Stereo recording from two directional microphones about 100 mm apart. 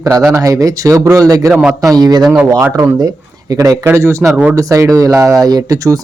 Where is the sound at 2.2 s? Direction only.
10° right (ahead or behind).